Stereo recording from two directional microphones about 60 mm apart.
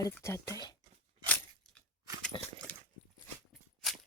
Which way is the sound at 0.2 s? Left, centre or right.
Left.